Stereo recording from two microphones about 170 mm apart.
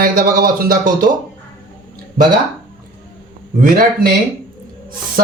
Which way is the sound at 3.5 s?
55° right (ahead or behind).